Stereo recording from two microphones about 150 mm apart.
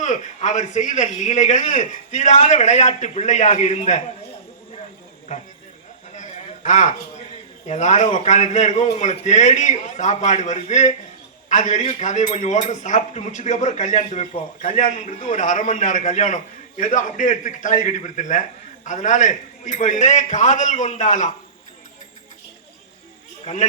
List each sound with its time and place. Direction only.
0.0 s a man's voice: 55° left (ahead or behind)
6.1 s a sound: 55° left (ahead or behind)
7.7 s a man's voice: 50° left (ahead or behind)